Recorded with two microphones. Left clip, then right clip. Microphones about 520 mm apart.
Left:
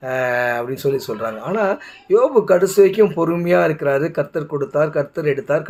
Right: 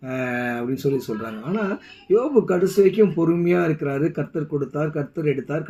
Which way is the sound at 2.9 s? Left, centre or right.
Centre.